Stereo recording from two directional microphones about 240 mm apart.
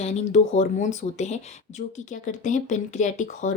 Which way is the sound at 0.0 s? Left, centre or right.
Left.